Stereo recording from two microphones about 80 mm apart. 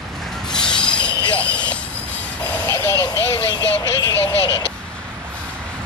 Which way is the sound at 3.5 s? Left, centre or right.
Left.